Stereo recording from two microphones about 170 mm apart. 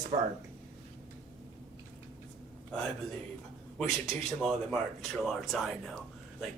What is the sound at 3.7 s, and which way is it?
Speech, centre (ahead or behind).